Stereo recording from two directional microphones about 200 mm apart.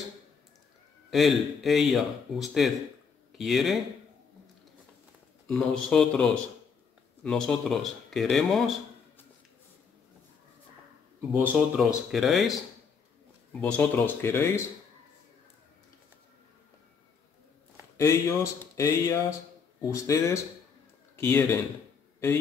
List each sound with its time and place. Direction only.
1.1 s speech: centre (ahead or behind)
5.5 s speech: 5° left (ahead or behind)
11.1 s speech: 10° right (ahead or behind); by 14.6 s 10° left (ahead or behind)
17.9 s speech: 15° left (ahead or behind)